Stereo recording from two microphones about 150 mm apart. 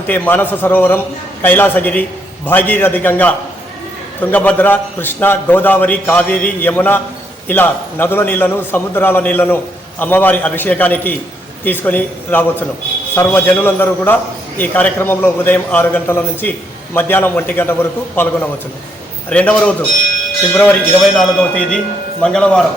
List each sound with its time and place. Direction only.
0.1 s a man's voice: 10° left (ahead or behind)